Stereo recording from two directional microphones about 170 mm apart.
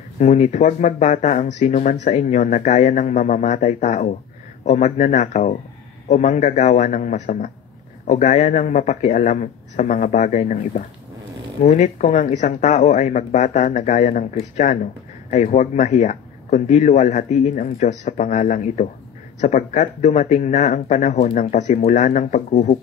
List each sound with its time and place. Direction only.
0.2 s speech: 45° left (ahead or behind)